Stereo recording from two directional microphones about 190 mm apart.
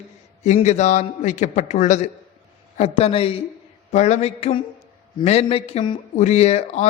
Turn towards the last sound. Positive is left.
turn(degrees=35)  # may be behind; listen again after turning